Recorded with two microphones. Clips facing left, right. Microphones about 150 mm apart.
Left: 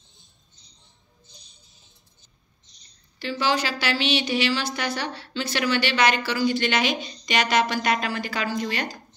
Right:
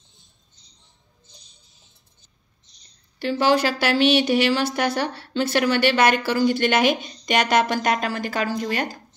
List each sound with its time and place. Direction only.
3.2 s a woman's voice: 55° right (ahead or behind)
3.8 s a sound: 50° right (ahead or behind)
4.7 s a woman's voice: 55° right (ahead or behind)